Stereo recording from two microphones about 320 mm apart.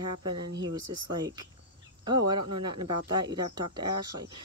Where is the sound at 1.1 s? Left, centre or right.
Centre.